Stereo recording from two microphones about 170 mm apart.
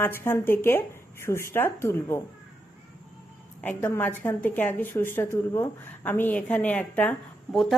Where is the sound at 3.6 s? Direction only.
10° left (ahead or behind).